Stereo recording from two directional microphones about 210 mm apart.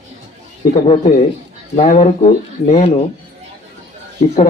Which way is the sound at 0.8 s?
30° left (ahead or behind).